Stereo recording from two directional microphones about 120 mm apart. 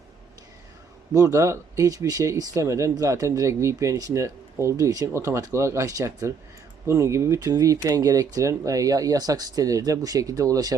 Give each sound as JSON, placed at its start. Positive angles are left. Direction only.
{"t": 1.1, "sound": "speech", "side_deg": -25}